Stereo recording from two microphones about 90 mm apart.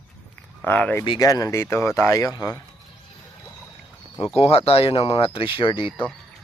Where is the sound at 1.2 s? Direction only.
40° left (ahead or behind).